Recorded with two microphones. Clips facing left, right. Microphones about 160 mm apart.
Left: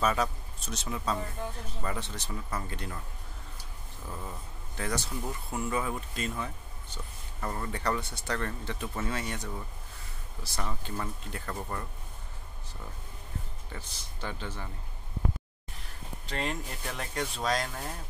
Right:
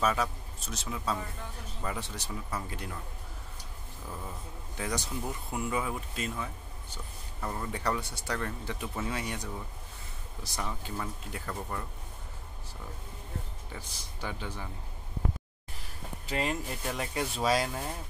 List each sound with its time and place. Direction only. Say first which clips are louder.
0.0 s a man's voice: left 1 dB; centre (ahead or behind)
4.7 s speech: left 1 dB; 15° right (ahead or behind)
10.6 s speech: left 1 dB; 5° right (ahead or behind)
13.7 s speech: even; 10° right (ahead or behind)
16.3 s speech: right 2 dB; 5° right (ahead or behind)